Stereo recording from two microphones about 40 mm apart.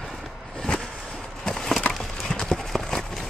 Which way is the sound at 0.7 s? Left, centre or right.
Left.